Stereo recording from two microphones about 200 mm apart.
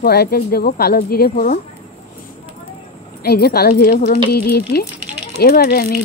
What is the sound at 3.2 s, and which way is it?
Speech, 50° left (ahead or behind).